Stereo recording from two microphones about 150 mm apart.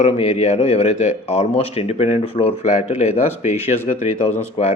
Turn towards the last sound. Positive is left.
turn(degrees=50)  # may be behind; listen again after turning